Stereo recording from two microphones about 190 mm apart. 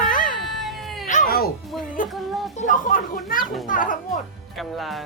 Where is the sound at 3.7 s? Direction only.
45° left (ahead or behind).